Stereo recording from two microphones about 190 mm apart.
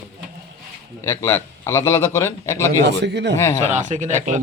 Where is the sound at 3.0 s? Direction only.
65° right (ahead or behind).